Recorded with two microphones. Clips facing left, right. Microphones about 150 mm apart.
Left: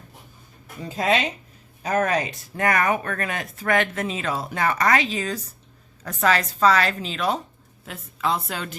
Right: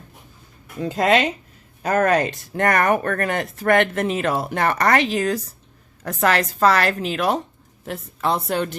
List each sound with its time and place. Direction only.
0.8 s a woman's voice: 70° right (ahead or behind); by 8.7 s 50° right (ahead or behind)